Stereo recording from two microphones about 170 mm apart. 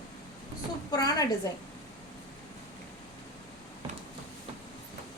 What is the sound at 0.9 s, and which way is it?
Speech, 20° left (ahead or behind).